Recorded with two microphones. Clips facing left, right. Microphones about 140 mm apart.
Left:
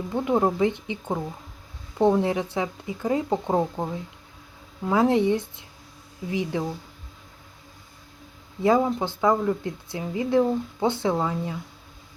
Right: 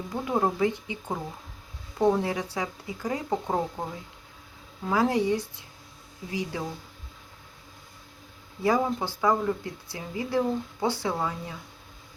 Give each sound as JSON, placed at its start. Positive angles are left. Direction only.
{"t": 0.1, "sound": "speech", "side_deg": 20}
{"t": 4.9, "sound": "speech", "side_deg": 25}
{"t": 8.6, "sound": "speech", "side_deg": 20}